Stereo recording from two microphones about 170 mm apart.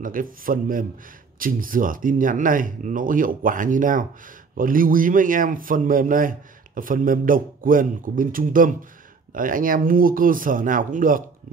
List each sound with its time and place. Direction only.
0.0 s a man's voice: 55° right (ahead or behind)